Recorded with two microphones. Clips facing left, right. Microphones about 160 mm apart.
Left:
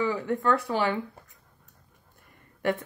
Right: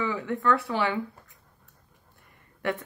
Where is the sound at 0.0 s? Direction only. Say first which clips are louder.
Left 1 dB; 40° left (ahead or behind).